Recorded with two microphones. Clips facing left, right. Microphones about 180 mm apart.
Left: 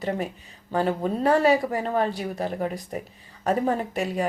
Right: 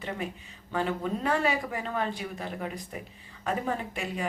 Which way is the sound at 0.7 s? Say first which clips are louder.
Left 5 dB; 40° left (ahead or behind).